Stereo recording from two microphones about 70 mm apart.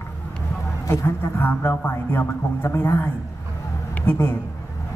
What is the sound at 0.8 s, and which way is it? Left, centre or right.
A man's voice, left.